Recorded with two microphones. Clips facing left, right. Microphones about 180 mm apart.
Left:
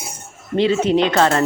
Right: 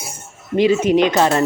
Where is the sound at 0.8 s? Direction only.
15° right (ahead or behind).